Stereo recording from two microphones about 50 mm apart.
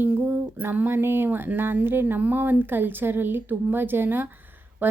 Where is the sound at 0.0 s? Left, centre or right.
Right.